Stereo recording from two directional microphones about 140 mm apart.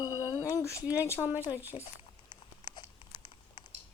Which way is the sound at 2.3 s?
30° left (ahead or behind).